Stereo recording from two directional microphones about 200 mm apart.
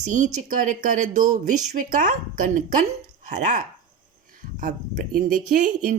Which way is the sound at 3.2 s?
40° right (ahead or behind).